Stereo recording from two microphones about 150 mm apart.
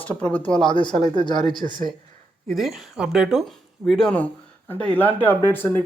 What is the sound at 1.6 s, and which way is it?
Speech, 65° right (ahead or behind).